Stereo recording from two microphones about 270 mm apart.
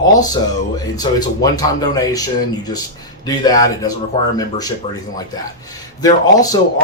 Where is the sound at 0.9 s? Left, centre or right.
Centre.